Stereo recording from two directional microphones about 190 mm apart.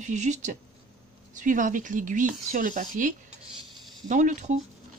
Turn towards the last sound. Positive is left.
turn(degrees=-40)  # may be behind; listen again after turning